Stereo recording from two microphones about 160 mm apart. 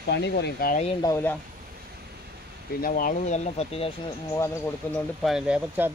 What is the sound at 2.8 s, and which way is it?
Speech, 60° left (ahead or behind).